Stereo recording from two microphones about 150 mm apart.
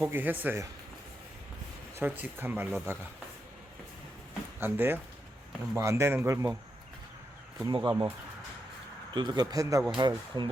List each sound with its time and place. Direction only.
0.0 s speech: 15° right (ahead or behind)
2.0 s speech: 15° right (ahead or behind)
4.6 s speech: 15° right (ahead or behind)
7.6 s speech: 30° right (ahead or behind)
9.1 s speech: 30° right (ahead or behind)